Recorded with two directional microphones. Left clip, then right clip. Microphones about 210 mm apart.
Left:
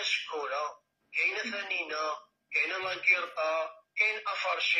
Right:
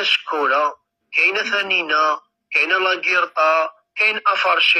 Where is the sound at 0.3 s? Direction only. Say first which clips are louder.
Right 16 dB; 45° right (ahead or behind).